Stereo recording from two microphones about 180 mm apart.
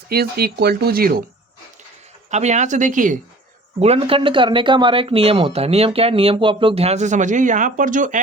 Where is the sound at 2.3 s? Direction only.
40° right (ahead or behind).